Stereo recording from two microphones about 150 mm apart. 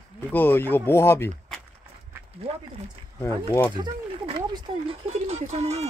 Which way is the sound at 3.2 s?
15° left (ahead or behind).